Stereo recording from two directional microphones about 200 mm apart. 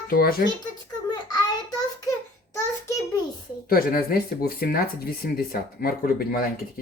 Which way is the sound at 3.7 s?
50° left (ahead or behind).